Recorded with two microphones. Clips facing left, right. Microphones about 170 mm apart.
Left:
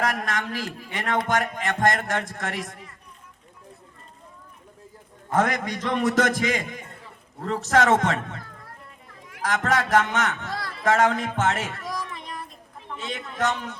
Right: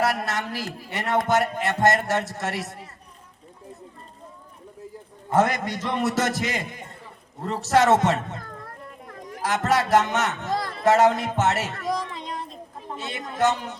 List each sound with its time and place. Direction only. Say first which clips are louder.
0.0 s a man's voice: right 2 dB; 10° right (ahead or behind)
5.3 s a man's voice: right 2 dB; 10° right (ahead or behind)
8.4 s children playing: right 6 dB; 55° right (ahead or behind)
9.4 s a man's voice: right 1 dB; 10° right (ahead or behind)
11.9 s a sound: right 5 dB; 25° right (ahead or behind)
13.4 s a man's voice: right 4 dB; 10° right (ahead or behind)